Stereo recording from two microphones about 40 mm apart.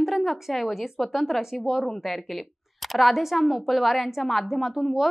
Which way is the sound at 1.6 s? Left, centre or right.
Centre.